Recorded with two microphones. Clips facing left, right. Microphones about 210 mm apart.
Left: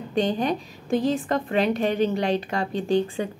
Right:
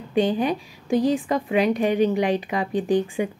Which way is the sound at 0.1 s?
10° right (ahead or behind).